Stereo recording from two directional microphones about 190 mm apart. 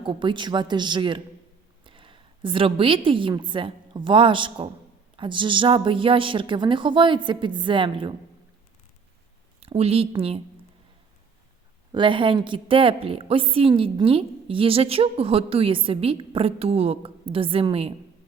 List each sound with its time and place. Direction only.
0.0 s a woman's voice: 25° right (ahead or behind)
9.6 s speech: 30° right (ahead or behind)
11.9 s a woman's voice: 25° right (ahead or behind)